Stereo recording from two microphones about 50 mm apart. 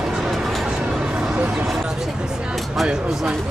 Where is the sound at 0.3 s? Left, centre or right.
Centre.